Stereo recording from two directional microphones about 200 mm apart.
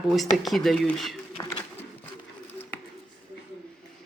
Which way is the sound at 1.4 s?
20° left (ahead or behind).